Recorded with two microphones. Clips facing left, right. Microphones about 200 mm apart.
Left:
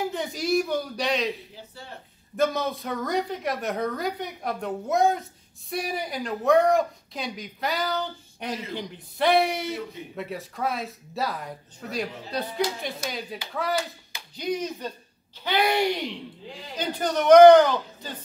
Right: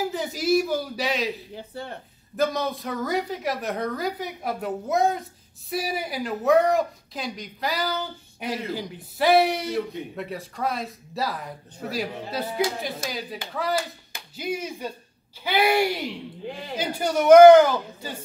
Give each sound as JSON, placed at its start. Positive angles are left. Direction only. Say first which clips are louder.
{"t": 0.0, "sound": "speech", "louder": "right 2 dB", "side_deg": 0}
{"t": 1.5, "sound": "speech", "louder": "right 7 dB", "side_deg": -60}
{"t": 2.3, "sound": "a man's voice", "louder": "even", "side_deg": 0}
{"t": 16.4, "sound": "speech", "louder": "right 6 dB", "side_deg": -60}
{"t": 16.7, "sound": "a man's voice", "louder": "right 1 dB", "side_deg": -10}